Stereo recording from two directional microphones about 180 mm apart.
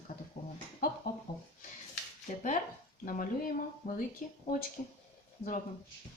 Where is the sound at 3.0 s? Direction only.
50° left (ahead or behind).